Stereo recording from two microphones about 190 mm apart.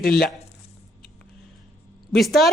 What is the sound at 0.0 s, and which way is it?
Speech, 50° left (ahead or behind).